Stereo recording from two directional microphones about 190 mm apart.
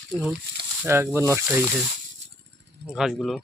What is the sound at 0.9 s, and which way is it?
Speech, 15° right (ahead or behind).